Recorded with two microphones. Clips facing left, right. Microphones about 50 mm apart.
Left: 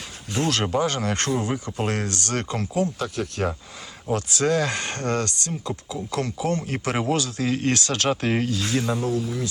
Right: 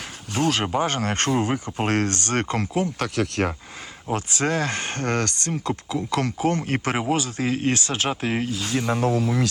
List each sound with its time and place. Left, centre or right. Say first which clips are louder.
0.5 s speech: even; centre
0.8 s speech: even; right
3.2 s speech: right 6 dB; right
4.1 s speech: left 2 dB; right
6.6 s speech: right 3 dB; right
6.9 s speech: left 2 dB; centre
7.3 s speech: even; right
7.5 s speech: left 1 dB; right
9.0 s speech: right 4 dB; right